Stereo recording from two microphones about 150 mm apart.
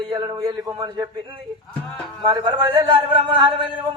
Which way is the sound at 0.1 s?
30° right (ahead or behind).